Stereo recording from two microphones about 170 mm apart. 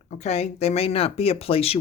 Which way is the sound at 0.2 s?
40° left (ahead or behind).